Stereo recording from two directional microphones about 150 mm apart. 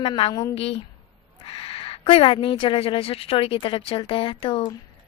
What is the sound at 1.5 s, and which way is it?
Speech, 40° left (ahead or behind).